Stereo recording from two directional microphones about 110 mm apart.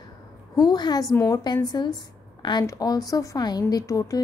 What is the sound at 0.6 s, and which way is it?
A woman's voice, 40° left (ahead or behind).